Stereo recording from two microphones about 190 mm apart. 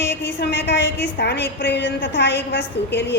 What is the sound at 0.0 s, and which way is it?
A woman's voice, 65° left (ahead or behind).